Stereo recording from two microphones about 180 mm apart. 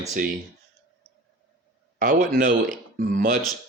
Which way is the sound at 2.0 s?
45° right (ahead or behind).